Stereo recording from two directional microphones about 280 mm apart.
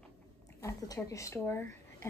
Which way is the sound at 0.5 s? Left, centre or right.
Centre.